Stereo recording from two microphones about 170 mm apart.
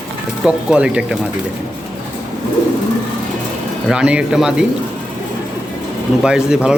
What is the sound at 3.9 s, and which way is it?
Speech, 5° right (ahead or behind).